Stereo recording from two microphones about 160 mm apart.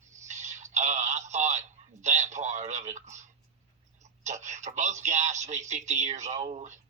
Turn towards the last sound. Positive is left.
turn(degrees=-50)  # may be behind; listen again after turning